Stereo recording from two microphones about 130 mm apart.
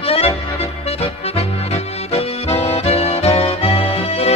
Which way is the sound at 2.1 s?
50° left (ahead or behind).